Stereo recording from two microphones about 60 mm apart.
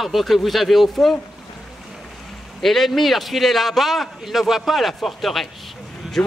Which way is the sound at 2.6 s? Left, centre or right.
Centre.